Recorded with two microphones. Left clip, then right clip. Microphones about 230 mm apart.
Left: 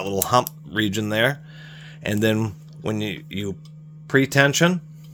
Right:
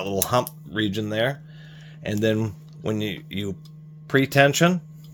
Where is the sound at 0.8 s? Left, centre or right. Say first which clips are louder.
Left 3 dB; left; by 4.8 s centre.